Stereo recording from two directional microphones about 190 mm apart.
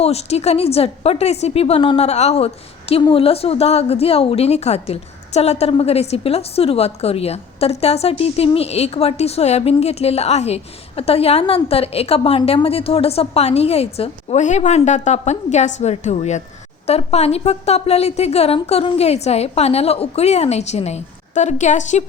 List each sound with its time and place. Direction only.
0.0 s a woman's voice: 35° left (ahead or behind)